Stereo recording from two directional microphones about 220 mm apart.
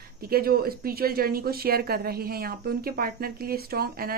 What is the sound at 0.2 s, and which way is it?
A woman's voice, 45° right (ahead or behind).